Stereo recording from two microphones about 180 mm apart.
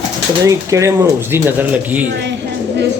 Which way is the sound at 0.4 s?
15° right (ahead or behind).